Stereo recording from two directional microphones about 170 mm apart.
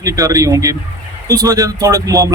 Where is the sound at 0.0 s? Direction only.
20° right (ahead or behind).